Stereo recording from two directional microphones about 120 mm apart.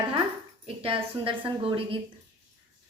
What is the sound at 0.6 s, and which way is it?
Speech, 50° right (ahead or behind).